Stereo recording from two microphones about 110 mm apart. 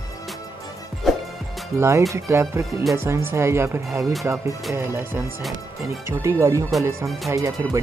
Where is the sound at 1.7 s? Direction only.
25° right (ahead or behind).